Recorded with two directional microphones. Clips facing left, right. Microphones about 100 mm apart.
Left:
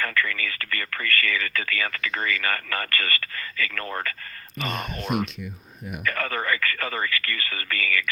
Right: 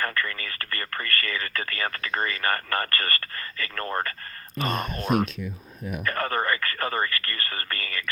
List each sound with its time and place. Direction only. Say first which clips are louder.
0.0 s speech: left 2 dB; 35° right (ahead or behind)
4.6 s speech: right 2 dB; 45° right (ahead or behind)